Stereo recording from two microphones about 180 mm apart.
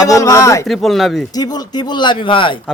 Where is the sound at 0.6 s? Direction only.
Centre (ahead or behind).